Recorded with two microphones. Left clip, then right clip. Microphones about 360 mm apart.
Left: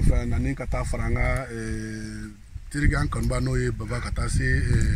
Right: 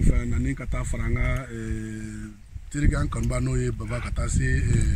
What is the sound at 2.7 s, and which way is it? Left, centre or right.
Speech, centre.